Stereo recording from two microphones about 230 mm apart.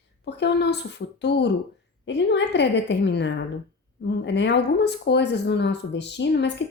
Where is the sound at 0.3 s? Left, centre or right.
Left.